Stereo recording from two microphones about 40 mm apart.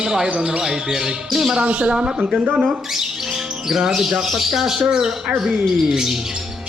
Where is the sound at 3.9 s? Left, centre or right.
Centre.